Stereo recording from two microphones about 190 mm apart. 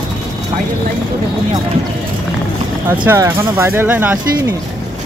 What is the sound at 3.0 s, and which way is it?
Speech, 10° right (ahead or behind).